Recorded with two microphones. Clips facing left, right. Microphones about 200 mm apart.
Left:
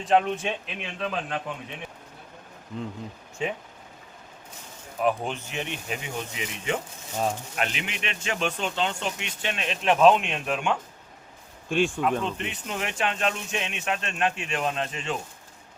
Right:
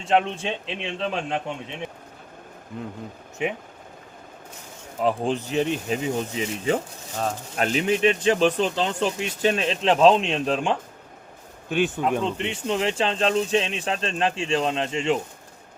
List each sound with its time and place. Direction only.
0.0 s a man's voice: 25° right (ahead or behind)
3.4 s speech: 15° right (ahead or behind)
4.9 s speech: 30° right (ahead or behind)
11.9 s a man's voice: 25° right (ahead or behind)